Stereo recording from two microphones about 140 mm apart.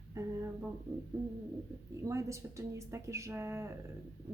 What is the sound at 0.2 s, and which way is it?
Speech, 25° right (ahead or behind).